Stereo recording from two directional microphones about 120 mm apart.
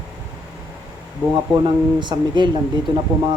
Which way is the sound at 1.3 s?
40° right (ahead or behind).